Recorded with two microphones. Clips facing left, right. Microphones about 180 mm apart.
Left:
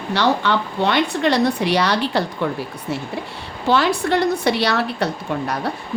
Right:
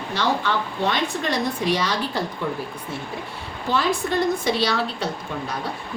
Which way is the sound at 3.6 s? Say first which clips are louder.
Left 5 dB; 75° left (ahead or behind).